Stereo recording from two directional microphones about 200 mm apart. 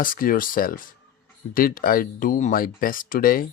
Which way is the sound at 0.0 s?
45° left (ahead or behind).